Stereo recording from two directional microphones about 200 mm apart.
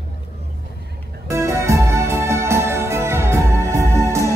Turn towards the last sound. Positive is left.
turn(degrees=-15)  # may be behind; listen again after turning